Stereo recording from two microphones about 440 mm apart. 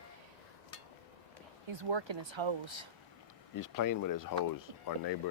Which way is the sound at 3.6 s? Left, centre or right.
Left.